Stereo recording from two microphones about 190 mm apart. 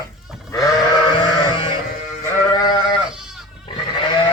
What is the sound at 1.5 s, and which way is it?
Sheep, 25° left (ahead or behind).